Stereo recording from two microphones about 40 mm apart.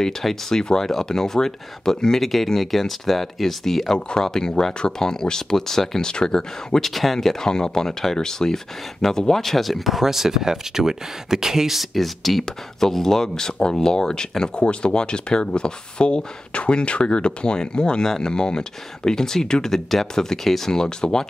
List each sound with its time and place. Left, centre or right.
0.0 s speech: centre